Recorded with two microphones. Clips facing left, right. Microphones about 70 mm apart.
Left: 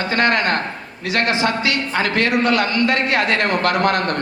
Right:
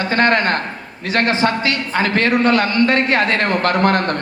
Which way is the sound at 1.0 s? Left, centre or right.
Right.